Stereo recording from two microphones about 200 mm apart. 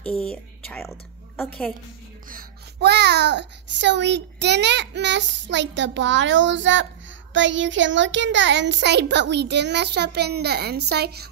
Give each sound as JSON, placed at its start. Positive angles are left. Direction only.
{"t": 0.0, "sound": "speech", "side_deg": 5}
{"t": 2.2, "sound": "a child's voice", "side_deg": -50}